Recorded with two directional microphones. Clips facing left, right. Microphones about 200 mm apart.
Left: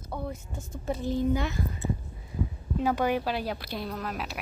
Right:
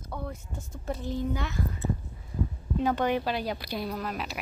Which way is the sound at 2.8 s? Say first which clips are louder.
Even; 10° left (ahead or behind).